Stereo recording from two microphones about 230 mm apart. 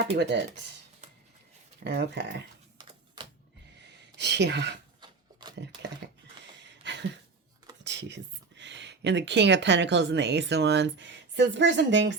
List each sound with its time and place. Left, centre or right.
0.2 s speech: right
1.8 s speech: right
3.8 s a sound: right
4.9 s a sound: centre
6.0 s typing: right
7.9 s speech: right